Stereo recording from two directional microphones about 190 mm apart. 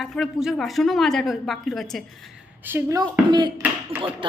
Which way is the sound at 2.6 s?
15° right (ahead or behind).